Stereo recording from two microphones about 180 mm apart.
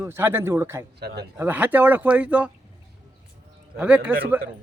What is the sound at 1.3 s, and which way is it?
Speech, 10° right (ahead or behind).